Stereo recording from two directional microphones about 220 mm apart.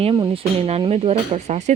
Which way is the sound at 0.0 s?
25° right (ahead or behind).